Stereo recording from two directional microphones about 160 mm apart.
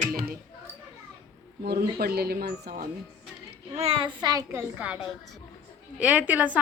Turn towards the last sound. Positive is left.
turn(degrees=-10)  # may be behind; listen again after turning